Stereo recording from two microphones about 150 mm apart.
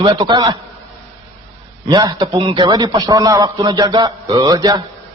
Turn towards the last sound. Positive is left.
turn(degrees=-30)  # may be behind; listen again after turning